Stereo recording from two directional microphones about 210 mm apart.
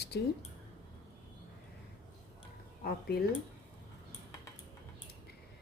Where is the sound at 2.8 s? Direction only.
45° left (ahead or behind).